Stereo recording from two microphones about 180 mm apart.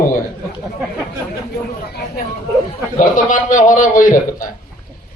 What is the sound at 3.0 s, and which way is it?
A man's voice, 45° left (ahead or behind).